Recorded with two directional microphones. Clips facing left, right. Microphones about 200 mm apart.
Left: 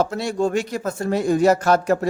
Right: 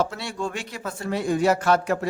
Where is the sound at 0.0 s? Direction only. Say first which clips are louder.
Left 6 dB; 40° left (ahead or behind).